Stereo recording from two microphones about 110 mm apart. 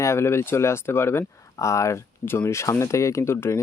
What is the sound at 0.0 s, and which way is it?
Speech, 25° left (ahead or behind).